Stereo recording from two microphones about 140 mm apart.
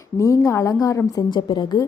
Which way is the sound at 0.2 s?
20° left (ahead or behind).